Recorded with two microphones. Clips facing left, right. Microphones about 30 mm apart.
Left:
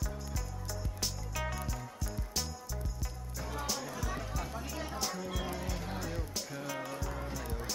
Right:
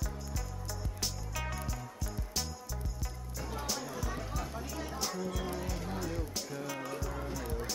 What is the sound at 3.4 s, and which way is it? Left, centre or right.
Music, centre.